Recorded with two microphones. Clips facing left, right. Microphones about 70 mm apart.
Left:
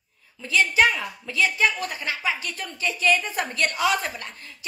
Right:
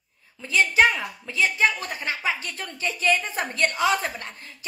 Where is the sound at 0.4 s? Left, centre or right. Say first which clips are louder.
Right 1 dB; right.